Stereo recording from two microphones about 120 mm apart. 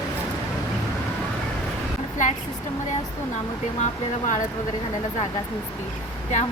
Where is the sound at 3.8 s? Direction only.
90° left.